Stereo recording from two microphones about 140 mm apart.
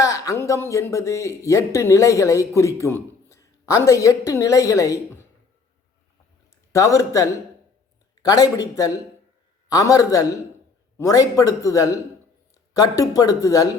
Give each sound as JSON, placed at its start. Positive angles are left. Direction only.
{"t": 0.0, "sound": "speech", "side_deg": 25}
{"t": 6.7, "sound": "a man's voice", "side_deg": 25}